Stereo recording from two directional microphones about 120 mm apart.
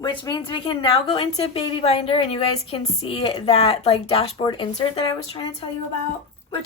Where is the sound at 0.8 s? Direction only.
55° left (ahead or behind).